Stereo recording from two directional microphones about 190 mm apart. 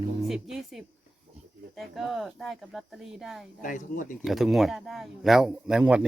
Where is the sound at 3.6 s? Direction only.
45° left (ahead or behind).